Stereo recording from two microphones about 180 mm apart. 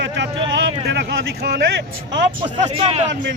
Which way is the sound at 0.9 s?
60° right (ahead or behind).